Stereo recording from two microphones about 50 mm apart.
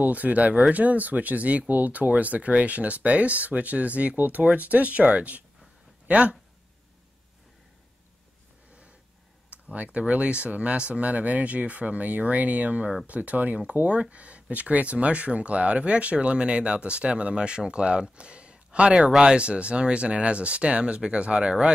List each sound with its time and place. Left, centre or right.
0.0 s speech: right
9.5 s speech: right